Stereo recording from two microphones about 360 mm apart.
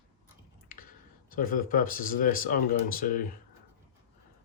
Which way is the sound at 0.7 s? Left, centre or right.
Left.